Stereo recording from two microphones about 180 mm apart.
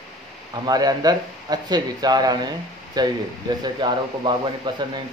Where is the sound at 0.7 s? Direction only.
20° right (ahead or behind).